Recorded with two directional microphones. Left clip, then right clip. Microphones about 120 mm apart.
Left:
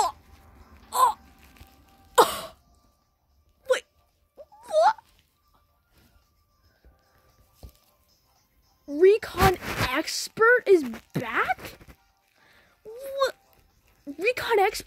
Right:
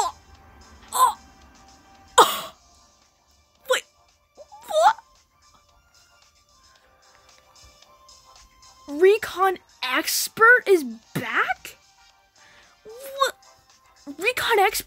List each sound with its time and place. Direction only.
0.8 s crow: 15° right (ahead or behind)
2.1 s throat clearing: 20° right (ahead or behind)
3.7 s music: 25° right (ahead or behind)
8.8 s a sound: 20° right (ahead or behind); by 11.7 s 5° right (ahead or behind)
12.4 s music: 15° right (ahead or behind)
14.0 s a sound: 20° right (ahead or behind)